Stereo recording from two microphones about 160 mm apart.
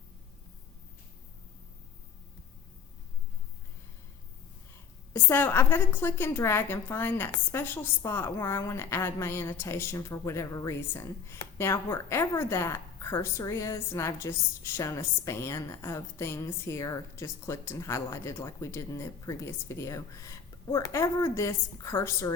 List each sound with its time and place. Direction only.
5.1 s a woman's voice: 15° left (ahead or behind)